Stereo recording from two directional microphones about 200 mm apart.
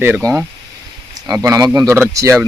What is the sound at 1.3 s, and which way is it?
Speech, 15° right (ahead or behind).